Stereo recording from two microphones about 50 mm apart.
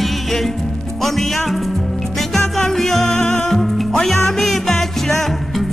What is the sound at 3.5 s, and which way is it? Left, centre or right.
Music, centre.